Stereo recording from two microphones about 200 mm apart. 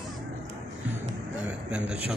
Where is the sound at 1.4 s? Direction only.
5° right (ahead or behind).